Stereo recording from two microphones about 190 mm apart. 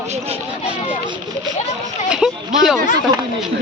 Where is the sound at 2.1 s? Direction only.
5° right (ahead or behind).